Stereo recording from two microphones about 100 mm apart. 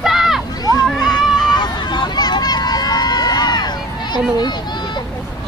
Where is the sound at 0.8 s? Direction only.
Centre (ahead or behind).